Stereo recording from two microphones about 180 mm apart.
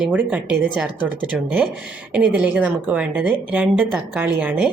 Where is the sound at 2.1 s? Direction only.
10° right (ahead or behind).